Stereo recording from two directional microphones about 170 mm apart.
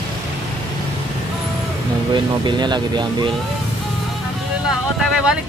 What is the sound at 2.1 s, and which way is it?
Speech, 25° right (ahead or behind).